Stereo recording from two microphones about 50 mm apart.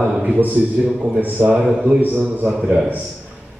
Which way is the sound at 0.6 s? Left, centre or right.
Centre.